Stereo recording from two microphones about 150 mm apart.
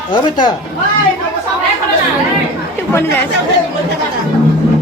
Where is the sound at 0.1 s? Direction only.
30° left (ahead or behind).